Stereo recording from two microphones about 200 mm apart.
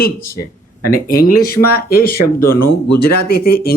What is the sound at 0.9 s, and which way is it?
Speech, 45° left (ahead or behind).